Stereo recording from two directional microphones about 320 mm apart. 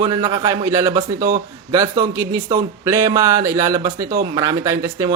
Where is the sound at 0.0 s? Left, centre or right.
Centre.